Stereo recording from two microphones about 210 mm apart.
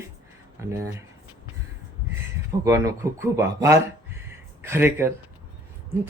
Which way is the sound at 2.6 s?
15° right (ahead or behind).